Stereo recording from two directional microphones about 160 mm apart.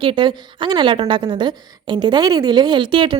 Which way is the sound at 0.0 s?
30° right (ahead or behind).